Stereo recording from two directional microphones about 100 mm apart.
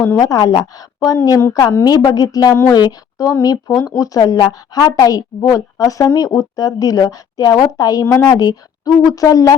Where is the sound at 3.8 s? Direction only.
35° left (ahead or behind).